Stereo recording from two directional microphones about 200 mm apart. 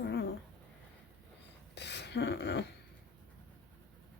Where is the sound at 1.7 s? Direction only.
60° left (ahead or behind).